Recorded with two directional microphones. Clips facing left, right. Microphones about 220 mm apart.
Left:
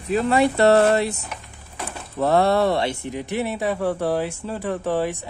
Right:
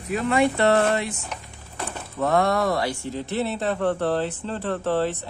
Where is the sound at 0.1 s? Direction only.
35° left (ahead or behind).